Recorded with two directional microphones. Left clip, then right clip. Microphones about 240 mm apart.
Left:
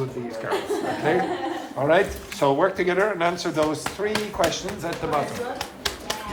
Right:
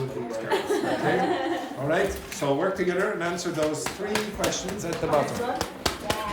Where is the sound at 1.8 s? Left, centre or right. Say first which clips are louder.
Left 7 dB; left.